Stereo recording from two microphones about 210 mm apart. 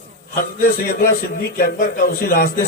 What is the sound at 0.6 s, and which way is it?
A man's voice, 45° left (ahead or behind).